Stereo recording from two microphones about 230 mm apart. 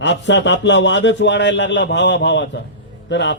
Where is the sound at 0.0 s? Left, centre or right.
Left.